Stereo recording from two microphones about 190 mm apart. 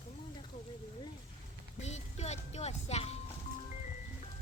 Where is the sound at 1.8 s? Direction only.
35° left (ahead or behind).